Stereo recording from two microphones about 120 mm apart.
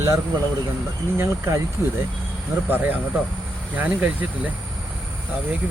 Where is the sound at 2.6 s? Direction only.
15° right (ahead or behind).